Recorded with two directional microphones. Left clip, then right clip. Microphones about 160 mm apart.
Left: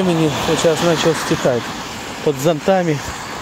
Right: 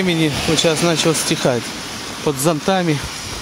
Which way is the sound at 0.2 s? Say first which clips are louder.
Left 1 dB; 20° right (ahead or behind).